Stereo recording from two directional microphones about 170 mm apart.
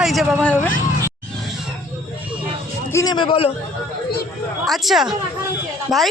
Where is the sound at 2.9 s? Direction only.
25° left (ahead or behind).